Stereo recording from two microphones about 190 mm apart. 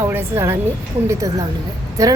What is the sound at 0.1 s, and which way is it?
A woman's voice, 10° right (ahead or behind).